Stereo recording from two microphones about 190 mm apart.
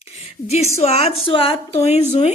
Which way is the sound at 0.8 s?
35° left (ahead or behind).